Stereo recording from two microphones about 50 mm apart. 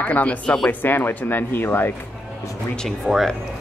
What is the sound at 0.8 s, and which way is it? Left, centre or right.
Speech, left.